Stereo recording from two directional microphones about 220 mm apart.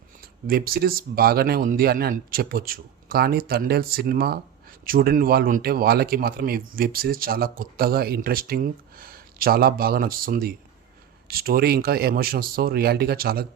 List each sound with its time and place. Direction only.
0.2 s a man's voice: 40° right (ahead or behind)